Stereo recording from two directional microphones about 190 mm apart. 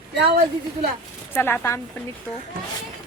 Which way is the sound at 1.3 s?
10° left (ahead or behind).